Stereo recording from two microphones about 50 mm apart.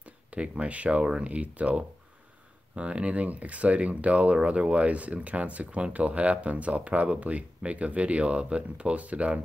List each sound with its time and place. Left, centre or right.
0.0 s speech: right